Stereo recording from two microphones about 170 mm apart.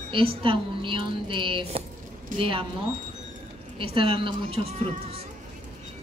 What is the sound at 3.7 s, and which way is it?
A woman's voice, 30° right (ahead or behind).